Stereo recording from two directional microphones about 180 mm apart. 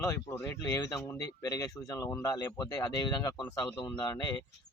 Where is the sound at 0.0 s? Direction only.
15° left (ahead or behind).